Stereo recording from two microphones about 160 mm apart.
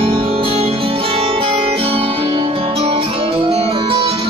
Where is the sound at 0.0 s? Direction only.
35° right (ahead or behind).